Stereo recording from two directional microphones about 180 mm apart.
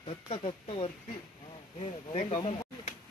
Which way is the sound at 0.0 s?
35° left (ahead or behind).